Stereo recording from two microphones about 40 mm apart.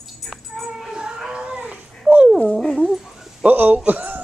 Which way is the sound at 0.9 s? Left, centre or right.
Centre.